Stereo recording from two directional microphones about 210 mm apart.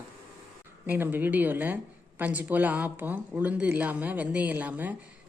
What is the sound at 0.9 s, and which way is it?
A woman's voice, 10° right (ahead or behind).